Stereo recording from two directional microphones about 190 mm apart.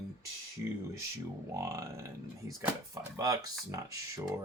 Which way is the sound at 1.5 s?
15° right (ahead or behind).